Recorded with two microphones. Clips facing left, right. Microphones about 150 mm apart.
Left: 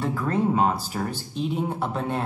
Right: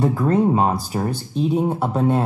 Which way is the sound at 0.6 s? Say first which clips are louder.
Right 3 dB; 40° right (ahead or behind).